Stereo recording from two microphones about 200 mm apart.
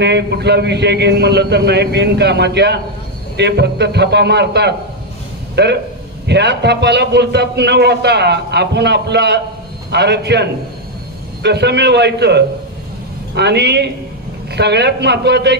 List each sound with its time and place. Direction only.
0.0 s a man's voice: 55° right (ahead or behind)